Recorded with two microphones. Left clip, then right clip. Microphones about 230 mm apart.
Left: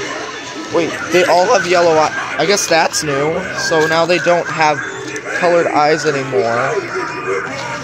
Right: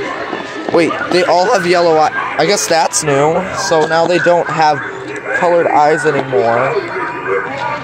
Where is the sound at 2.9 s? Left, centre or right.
Centre.